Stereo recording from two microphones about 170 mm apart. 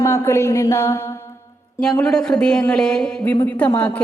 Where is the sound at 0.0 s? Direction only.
15° left (ahead or behind).